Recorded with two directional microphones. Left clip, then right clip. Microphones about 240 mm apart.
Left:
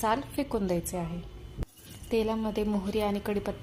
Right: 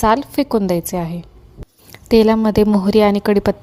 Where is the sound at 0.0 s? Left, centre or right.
Right.